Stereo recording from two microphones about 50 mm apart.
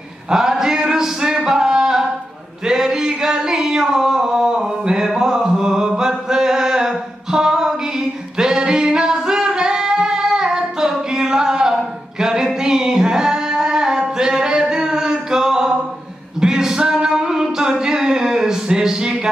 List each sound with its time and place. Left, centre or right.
0.3 s male singing: centre
2.6 s singing: centre
16.3 s music: centre